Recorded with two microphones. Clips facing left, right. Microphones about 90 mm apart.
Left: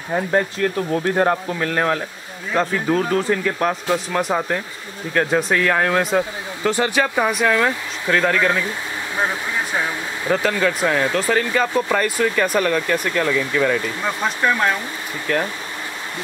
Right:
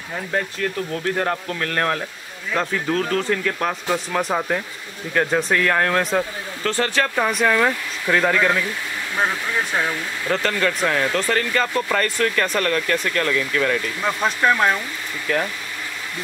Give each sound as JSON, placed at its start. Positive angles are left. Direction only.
{"t": 0.1, "sound": "speech", "side_deg": 30}
{"t": 6.6, "sound": "speech", "side_deg": 15}
{"t": 9.1, "sound": "speech", "side_deg": 15}
{"t": 14.0, "sound": "speech", "side_deg": 0}